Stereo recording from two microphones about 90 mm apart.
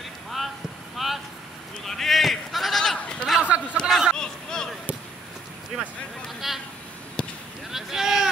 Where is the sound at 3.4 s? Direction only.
15° right (ahead or behind).